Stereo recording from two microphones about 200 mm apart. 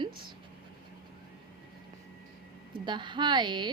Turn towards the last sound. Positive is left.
turn(degrees=-20)  # may be behind; listen again after turning